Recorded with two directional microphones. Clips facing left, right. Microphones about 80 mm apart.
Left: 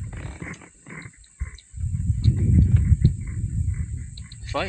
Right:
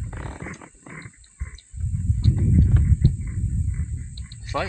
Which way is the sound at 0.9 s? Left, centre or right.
Right.